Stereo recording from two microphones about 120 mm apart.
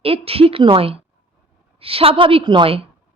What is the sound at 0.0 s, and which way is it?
A woman's voice, 55° right (ahead or behind).